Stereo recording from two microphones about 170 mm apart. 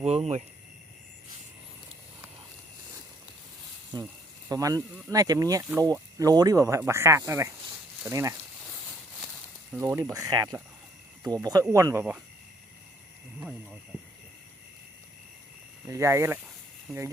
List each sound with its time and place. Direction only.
0.0 s speech: 35° right (ahead or behind)
4.0 s a sound: 20° right (ahead or behind)
5.0 s speech: 20° right (ahead or behind)
9.8 s speech: 20° right (ahead or behind)
15.9 s speech: 15° right (ahead or behind)